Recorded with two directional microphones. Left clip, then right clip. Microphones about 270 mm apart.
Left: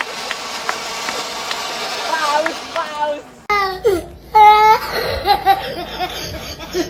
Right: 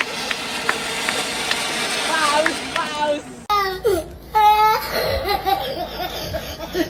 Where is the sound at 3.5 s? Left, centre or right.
Centre.